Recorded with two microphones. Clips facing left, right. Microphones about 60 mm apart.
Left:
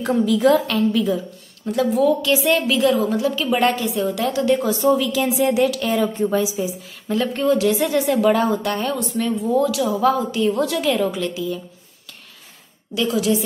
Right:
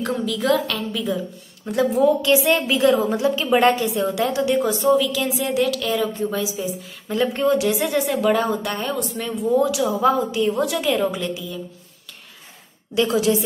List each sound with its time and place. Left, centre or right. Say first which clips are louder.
0.0 s a woman's voice: left 6 dB; centre
1.7 s a woman's voice: even; right
2.3 s a woman's voice: even; centre
2.6 s a woman's voice: even; right
4.4 s a woman's voice: left 4 dB; centre
4.9 s a woman's voice: left 1 dB; centre
7.1 s a woman's voice: even; centre
12.9 s a woman's voice: right 2 dB; right